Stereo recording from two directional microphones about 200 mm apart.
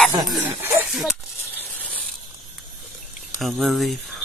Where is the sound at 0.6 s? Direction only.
5° right (ahead or behind).